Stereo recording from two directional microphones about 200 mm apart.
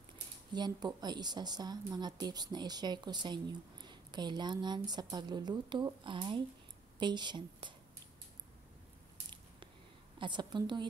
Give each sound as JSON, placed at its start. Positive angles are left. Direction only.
{"t": 0.5, "sound": "a woman's voice", "side_deg": -20}
{"t": 10.1, "sound": "a woman's voice", "side_deg": -25}